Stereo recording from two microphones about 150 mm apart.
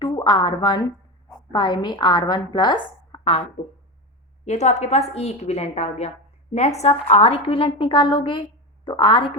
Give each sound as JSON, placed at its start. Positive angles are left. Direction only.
{"t": 0.0, "sound": "a woman's voice", "side_deg": 30}
{"t": 4.4, "sound": "a woman's voice", "side_deg": 50}